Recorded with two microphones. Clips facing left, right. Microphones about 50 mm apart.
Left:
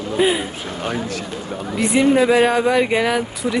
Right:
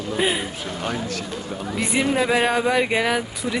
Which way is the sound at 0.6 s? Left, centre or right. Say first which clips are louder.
Left 3 dB; left.